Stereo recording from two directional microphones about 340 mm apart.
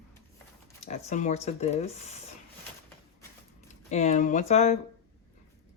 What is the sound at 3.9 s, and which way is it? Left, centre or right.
Speech, left.